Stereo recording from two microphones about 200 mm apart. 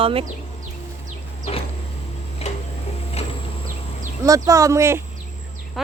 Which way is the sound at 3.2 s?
30° left (ahead or behind).